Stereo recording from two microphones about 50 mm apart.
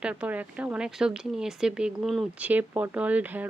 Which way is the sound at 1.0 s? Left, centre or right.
Centre.